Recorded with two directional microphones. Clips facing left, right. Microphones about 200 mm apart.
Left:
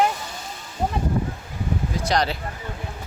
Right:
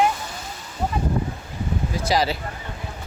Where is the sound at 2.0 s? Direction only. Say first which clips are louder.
Right 1 dB; 5° right (ahead or behind).